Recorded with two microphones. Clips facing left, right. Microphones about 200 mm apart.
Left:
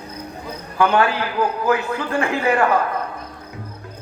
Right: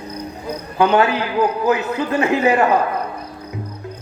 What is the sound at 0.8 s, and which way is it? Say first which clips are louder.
A man's voice: right 2 dB; 20° right (ahead or behind).